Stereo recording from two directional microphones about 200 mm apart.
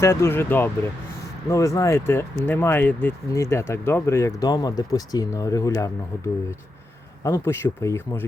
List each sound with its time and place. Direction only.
0.0 s speech: 15° left (ahead or behind)
7.3 s speech: 15° left (ahead or behind)